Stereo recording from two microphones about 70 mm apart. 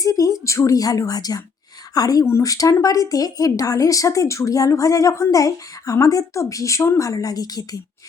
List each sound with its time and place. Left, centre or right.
0.0 s speech: left